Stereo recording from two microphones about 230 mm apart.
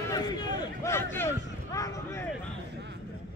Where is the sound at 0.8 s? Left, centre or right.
Centre.